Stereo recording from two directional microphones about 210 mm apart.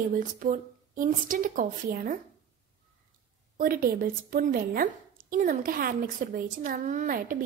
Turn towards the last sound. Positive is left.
turn(degrees=-40)  # may be behind; listen again after turning